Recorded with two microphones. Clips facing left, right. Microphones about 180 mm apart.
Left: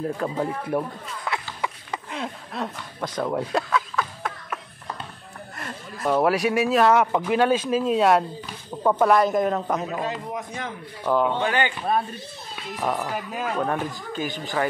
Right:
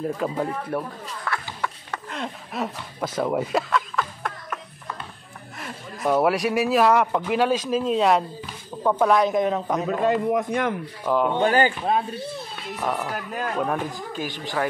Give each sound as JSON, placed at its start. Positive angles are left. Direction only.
{"t": 0.0, "sound": "speech", "side_deg": 0}
{"t": 0.7, "sound": "a sound", "side_deg": 15}
{"t": 2.5, "sound": "a sound", "side_deg": -5}
{"t": 5.6, "sound": "speech", "side_deg": -5}
{"t": 10.0, "sound": "speech", "side_deg": -55}
{"t": 11.1, "sound": "speech", "side_deg": -5}
{"t": 11.4, "sound": "speech", "side_deg": -40}
{"t": 12.8, "sound": "speech", "side_deg": 0}